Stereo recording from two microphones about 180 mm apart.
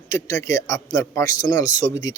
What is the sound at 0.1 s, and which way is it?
Speech, 15° left (ahead or behind).